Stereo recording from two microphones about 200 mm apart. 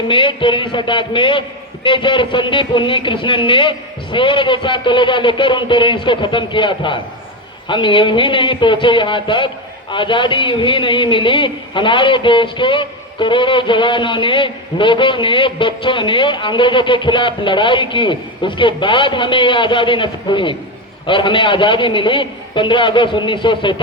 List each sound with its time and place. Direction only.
0.1 s a man's voice: 25° left (ahead or behind)